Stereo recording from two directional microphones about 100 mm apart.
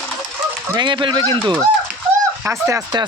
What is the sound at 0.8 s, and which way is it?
Speech, 50° right (ahead or behind).